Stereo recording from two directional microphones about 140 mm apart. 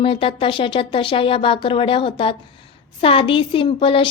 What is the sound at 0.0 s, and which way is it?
Speech, 40° left (ahead or behind).